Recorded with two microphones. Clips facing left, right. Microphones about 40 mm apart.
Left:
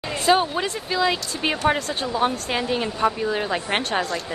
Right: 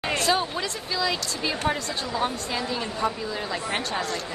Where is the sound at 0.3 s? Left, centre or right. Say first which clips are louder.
Left 10 dB; left.